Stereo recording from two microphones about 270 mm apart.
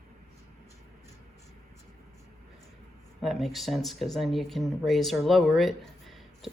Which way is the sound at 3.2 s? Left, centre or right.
Centre.